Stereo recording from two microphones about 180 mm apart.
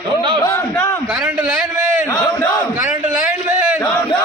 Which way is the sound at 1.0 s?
5° right (ahead or behind).